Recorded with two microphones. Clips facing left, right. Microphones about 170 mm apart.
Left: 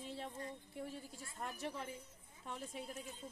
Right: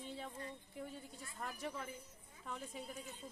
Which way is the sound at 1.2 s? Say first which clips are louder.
Left 1 dB; 25° left (ahead or behind).